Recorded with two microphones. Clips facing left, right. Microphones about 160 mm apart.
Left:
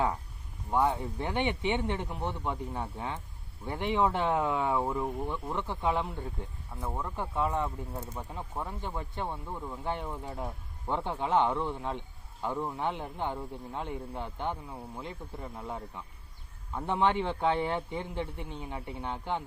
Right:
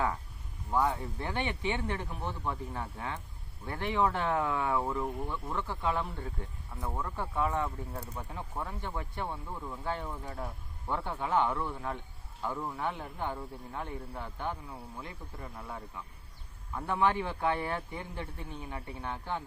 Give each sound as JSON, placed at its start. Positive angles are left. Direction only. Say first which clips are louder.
{"t": 0.7, "sound": "speech", "louder": "left 2 dB", "side_deg": 25}